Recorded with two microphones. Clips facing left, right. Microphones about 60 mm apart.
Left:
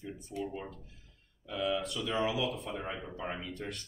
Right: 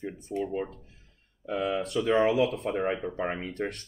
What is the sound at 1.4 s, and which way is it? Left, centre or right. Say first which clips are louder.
Speech: right 4 dB; right.